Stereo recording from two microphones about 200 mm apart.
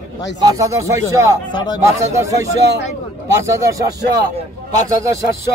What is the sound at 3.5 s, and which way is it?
Speech, 15° right (ahead or behind).